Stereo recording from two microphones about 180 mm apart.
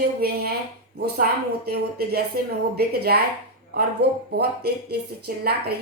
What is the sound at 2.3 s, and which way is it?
Speech, 60° right (ahead or behind).